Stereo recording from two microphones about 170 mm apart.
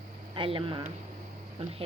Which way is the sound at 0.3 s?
30° right (ahead or behind).